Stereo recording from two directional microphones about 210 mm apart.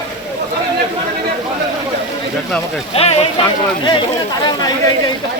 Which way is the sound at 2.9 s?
30° left (ahead or behind).